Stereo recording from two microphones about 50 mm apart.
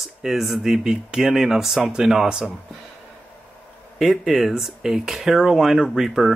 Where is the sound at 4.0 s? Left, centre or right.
Centre.